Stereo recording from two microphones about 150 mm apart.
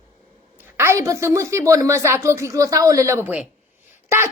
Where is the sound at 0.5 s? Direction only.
15° right (ahead or behind).